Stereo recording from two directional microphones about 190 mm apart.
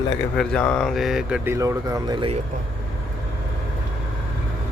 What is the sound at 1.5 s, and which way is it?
Speech, 15° right (ahead or behind).